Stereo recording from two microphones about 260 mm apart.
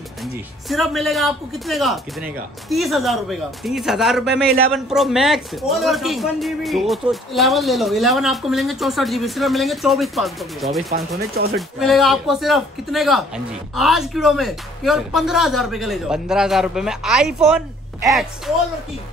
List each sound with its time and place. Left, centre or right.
0.7 s a man's voice: centre
11.1 s speech: right
11.5 s a man's voice: centre